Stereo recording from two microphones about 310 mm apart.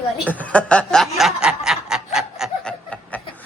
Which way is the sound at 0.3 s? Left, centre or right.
Centre.